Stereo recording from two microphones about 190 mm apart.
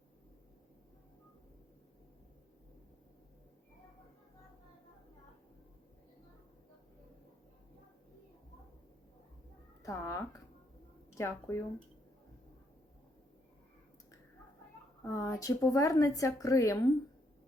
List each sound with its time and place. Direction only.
9.8 s a sound: 15° left (ahead or behind)
11.1 s a woman's voice: 15° left (ahead or behind)
15.0 s a woman's voice: 15° left (ahead or behind)